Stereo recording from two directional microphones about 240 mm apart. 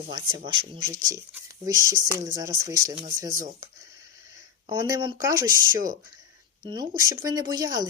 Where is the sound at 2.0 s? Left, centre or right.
Centre.